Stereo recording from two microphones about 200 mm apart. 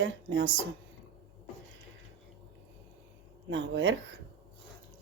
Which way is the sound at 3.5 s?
65° right (ahead or behind).